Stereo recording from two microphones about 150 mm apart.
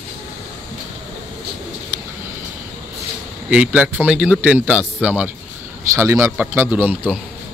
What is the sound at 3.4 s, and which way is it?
A man's voice, 10° right (ahead or behind).